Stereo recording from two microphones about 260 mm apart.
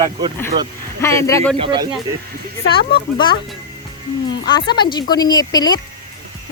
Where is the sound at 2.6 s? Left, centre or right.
Centre.